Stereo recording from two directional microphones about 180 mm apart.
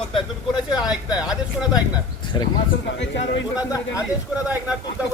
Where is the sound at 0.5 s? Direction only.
5° right (ahead or behind).